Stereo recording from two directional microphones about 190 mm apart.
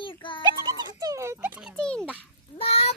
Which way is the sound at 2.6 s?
30° left (ahead or behind).